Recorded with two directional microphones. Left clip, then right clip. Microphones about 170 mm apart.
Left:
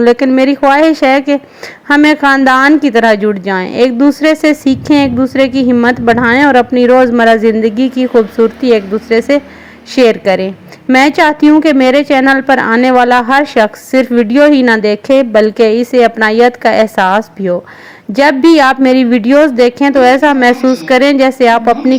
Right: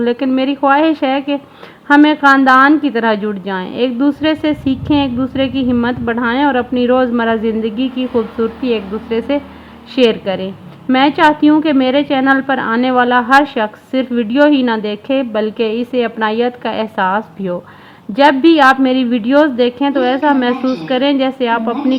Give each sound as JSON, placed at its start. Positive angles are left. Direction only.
{"t": 0.0, "sound": "a woman's voice", "side_deg": 30}